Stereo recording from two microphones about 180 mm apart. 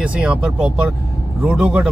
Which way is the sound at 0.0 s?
5° right (ahead or behind).